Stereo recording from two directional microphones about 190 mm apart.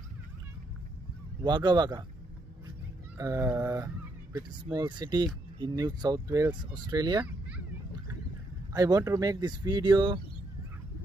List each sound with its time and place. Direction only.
1.4 s speech: 20° right (ahead or behind)
3.2 s speech: 15° right (ahead or behind)
8.7 s speech: 20° right (ahead or behind)